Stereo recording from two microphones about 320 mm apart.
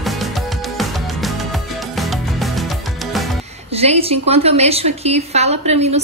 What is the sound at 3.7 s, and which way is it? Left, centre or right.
A woman's voice, centre.